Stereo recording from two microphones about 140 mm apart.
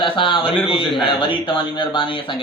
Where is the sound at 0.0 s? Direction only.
40° left (ahead or behind).